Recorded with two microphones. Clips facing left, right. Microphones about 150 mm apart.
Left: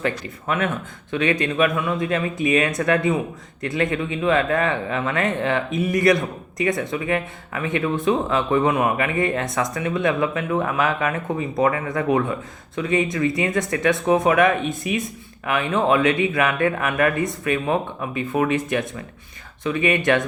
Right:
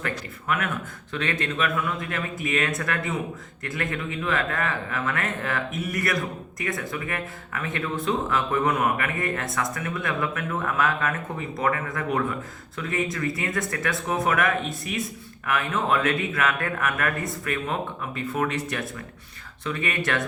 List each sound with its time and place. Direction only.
0.0 s speech: 25° left (ahead or behind)